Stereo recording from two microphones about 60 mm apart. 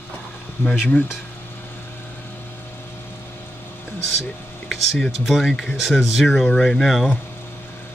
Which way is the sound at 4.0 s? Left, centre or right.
Centre.